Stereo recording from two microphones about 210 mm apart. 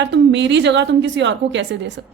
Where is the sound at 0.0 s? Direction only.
55° right (ahead or behind).